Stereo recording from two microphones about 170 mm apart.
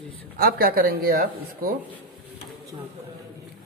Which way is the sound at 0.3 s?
65° right (ahead or behind).